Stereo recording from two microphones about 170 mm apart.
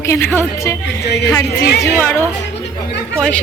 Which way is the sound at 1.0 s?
75° left (ahead or behind).